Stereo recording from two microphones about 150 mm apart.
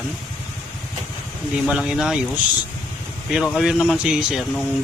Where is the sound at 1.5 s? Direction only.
5° right (ahead or behind).